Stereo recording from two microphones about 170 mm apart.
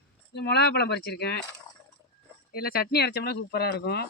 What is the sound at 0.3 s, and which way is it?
Speech, 70° left (ahead or behind).